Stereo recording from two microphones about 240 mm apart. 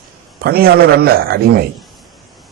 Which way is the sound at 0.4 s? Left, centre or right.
Right.